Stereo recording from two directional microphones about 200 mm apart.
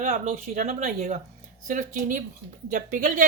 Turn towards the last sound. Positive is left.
turn(degrees=-40)  # may be behind; listen again after turning